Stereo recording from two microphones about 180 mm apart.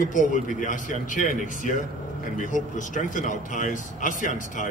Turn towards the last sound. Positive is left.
turn(degrees=45)  # may be behind; listen again after turning